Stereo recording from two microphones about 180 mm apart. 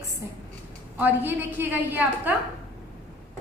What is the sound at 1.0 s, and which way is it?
A woman's voice, 10° right (ahead or behind).